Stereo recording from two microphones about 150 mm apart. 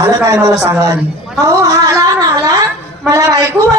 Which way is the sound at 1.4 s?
25° right (ahead or behind).